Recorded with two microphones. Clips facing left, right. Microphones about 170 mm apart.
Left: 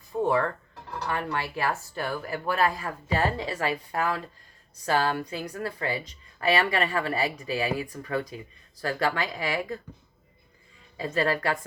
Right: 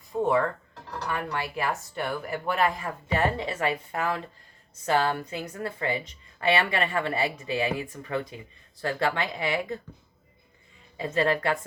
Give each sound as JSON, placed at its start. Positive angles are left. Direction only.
{"t": 0.1, "sound": "music", "side_deg": -5}
{"t": 1.1, "sound": "speech", "side_deg": -20}
{"t": 10.9, "sound": "speech", "side_deg": -25}